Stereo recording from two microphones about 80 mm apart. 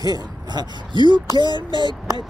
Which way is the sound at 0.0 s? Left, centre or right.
Right.